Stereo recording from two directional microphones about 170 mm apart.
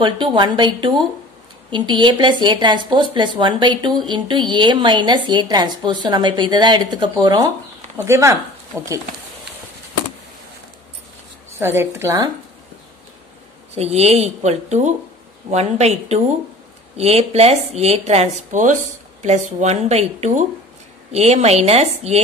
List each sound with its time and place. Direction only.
0.0 s speech: 30° right (ahead or behind)
11.5 s a woman's voice: 15° right (ahead or behind)
13.7 s a woman's voice: 40° right (ahead or behind)